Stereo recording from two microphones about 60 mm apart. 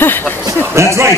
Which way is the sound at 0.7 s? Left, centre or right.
Right.